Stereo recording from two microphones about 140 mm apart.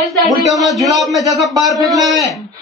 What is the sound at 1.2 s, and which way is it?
Speech, 25° right (ahead or behind).